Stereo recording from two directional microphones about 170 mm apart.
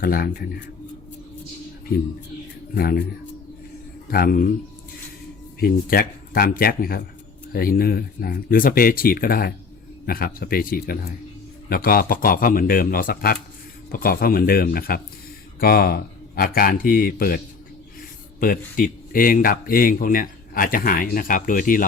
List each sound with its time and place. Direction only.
0.0 s speech: 60° left (ahead or behind)
2.7 s speech: 65° left (ahead or behind)
4.1 s speech: 60° left (ahead or behind)
5.5 s speech: 60° left (ahead or behind)